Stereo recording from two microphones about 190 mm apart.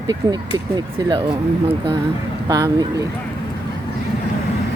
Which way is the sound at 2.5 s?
20° right (ahead or behind).